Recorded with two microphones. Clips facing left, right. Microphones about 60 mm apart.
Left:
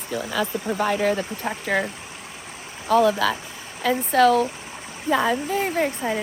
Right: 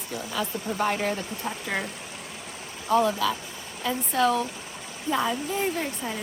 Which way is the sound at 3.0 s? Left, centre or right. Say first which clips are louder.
Left 5 dB; left.